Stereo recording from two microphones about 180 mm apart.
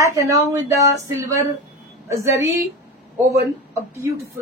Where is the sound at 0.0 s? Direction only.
20° right (ahead or behind).